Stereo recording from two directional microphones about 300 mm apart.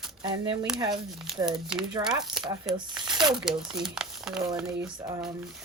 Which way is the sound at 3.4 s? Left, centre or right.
Centre.